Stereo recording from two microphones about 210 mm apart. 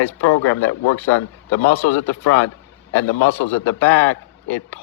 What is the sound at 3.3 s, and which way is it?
Speech, 10° left (ahead or behind).